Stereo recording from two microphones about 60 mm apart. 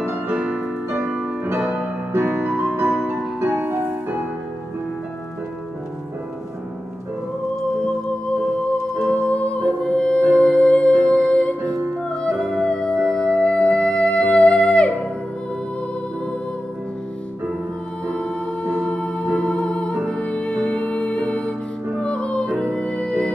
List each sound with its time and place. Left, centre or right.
0.3 s music: centre
1.5 s music: right
2.1 s music: right
9.3 s music: centre
12.1 s music: centre
18.0 s humming: centre
20.1 s music: centre